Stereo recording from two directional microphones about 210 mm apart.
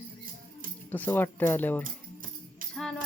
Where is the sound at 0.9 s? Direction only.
10° left (ahead or behind).